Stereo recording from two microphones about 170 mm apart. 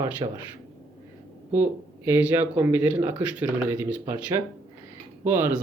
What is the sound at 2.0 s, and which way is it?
Speech, 15° right (ahead or behind).